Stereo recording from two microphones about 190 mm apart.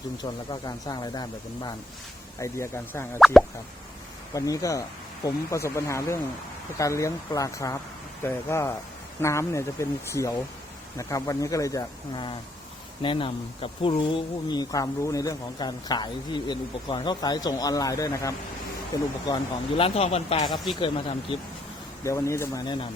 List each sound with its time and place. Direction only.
0.2 s speech: 20° left (ahead or behind)
3.2 s plop: centre (ahead or behind)
4.4 s speech: 20° left (ahead or behind)
22.0 s speech: 15° left (ahead or behind)